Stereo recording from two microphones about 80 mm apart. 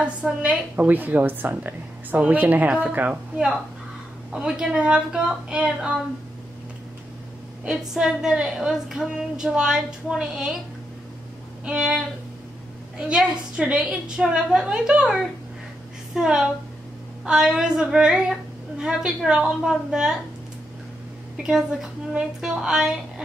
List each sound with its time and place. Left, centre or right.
0.0 s a woman's voice: centre
4.3 s a woman's voice: centre
7.6 s a woman's voice: centre
11.6 s a woman's voice: centre
21.4 s a woman's voice: centre